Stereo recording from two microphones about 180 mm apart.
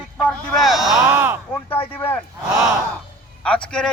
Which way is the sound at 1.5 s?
10° left (ahead or behind).